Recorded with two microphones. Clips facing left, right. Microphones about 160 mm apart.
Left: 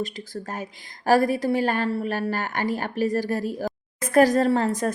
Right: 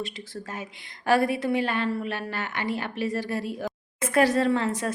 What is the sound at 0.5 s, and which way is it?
A woman's voice, 40° left (ahead or behind).